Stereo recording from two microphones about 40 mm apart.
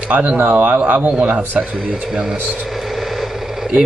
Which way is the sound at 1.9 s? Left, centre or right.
Centre.